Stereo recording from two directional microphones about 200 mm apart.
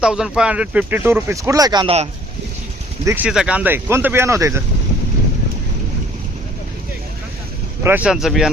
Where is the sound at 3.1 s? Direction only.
5° right (ahead or behind).